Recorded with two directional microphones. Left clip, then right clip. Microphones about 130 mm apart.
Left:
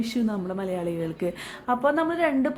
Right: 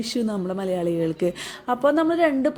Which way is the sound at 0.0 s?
35° right (ahead or behind).